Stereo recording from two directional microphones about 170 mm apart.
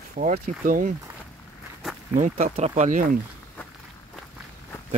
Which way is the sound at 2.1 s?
45° right (ahead or behind).